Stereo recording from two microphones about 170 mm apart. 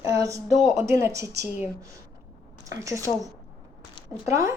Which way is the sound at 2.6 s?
20° right (ahead or behind).